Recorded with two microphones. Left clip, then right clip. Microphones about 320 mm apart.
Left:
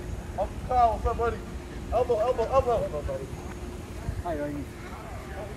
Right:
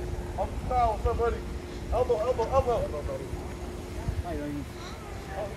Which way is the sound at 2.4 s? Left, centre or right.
Left.